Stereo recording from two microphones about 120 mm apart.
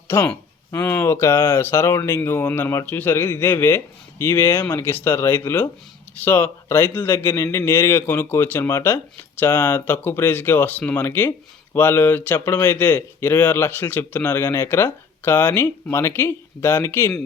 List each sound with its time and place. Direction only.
0.1 s speech: 20° left (ahead or behind)